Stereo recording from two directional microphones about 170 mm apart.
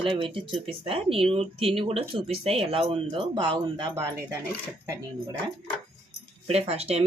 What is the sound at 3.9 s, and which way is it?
Speech, 20° right (ahead or behind).